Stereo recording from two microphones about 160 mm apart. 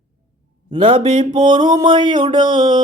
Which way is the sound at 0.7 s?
30° right (ahead or behind).